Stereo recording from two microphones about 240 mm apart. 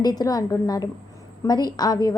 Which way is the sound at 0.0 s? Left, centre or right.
Centre.